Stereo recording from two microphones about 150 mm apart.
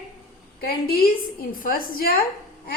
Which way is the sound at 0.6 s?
90° left.